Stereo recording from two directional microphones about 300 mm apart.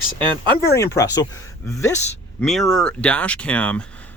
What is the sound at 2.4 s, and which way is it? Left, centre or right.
Speech, centre.